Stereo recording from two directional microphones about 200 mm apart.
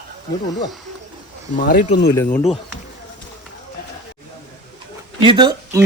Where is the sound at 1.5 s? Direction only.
40° left (ahead or behind).